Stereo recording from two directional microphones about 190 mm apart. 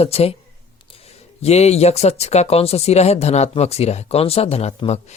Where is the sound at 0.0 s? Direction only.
30° left (ahead or behind).